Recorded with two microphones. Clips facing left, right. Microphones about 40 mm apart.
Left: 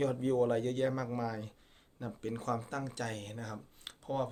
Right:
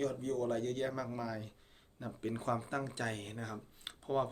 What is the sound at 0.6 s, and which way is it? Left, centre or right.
Speech, centre.